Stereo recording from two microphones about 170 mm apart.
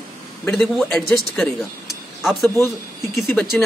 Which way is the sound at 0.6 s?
Centre (ahead or behind).